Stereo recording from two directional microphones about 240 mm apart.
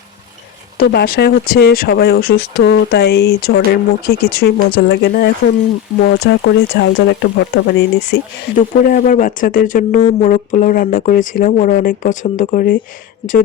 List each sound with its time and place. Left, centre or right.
0.8 s speech: left
8.5 s speech: left